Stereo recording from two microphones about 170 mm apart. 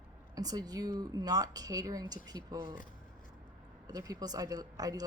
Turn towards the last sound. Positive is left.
turn(degrees=-20)  # may be behind; listen again after turning